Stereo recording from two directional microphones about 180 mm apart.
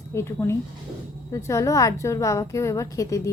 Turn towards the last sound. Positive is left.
turn(degrees=20)  # may be behind; listen again after turning